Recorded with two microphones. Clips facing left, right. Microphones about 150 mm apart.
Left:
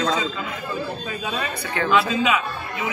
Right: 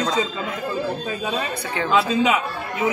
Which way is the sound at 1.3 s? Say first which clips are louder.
Right 1 dB; 20° right (ahead or behind).